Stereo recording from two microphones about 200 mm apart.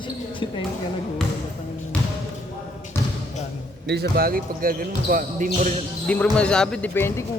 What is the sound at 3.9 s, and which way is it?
Speech, 50° right (ahead or behind).